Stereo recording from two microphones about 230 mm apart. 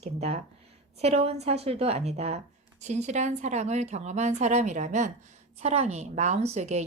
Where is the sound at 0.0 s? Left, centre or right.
Right.